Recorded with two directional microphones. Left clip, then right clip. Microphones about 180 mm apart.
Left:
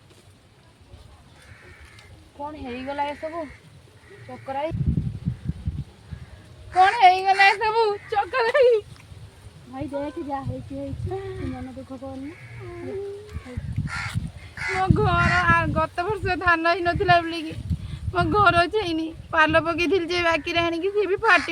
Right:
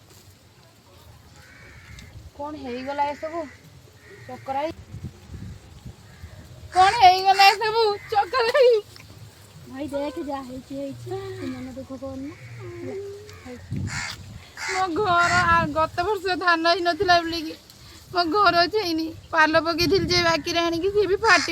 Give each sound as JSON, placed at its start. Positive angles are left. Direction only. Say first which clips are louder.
{"t": 2.4, "sound": "speech", "louder": "right 1 dB", "side_deg": -50}
{"t": 4.4, "sound": "speech", "louder": "right 1 dB", "side_deg": -40}
{"t": 6.7, "sound": "a sound", "louder": "right 1 dB", "side_deg": -10}
{"t": 7.6, "sound": "speech", "louder": "even", "side_deg": 0}
{"t": 11.9, "sound": "speech", "louder": "right 2 dB", "side_deg": -30}
{"t": 13.8, "sound": "speech", "louder": "left 1 dB", "side_deg": -30}
{"t": 14.5, "sound": "a sound", "louder": "even", "side_deg": -25}
{"t": 14.8, "sound": "speech", "louder": "right 2 dB", "side_deg": -65}
{"t": 16.2, "sound": "speech", "louder": "left 1 dB", "side_deg": -20}
{"t": 18.1, "sound": "speech", "louder": "even", "side_deg": 10}